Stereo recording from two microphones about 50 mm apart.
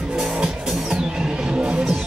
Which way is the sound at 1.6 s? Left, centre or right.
Right.